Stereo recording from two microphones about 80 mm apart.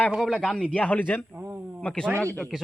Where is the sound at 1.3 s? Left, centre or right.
Right.